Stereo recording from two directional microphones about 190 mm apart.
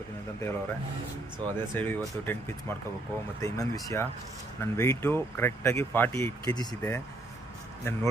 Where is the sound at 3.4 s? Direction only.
15° left (ahead or behind).